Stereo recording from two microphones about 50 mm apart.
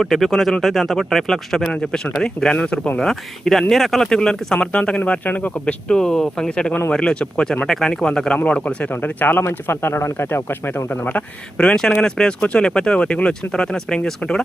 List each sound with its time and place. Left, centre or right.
0.0 s speech: centre; by 2.8 s left
3.1 s speech: centre; by 5.2 s left
5.2 s speech: left
5.9 s speech: centre
8.4 s speech: left
8.9 s speech: left
9.6 s speech: left
10.8 s speech: left
11.5 s speech: centre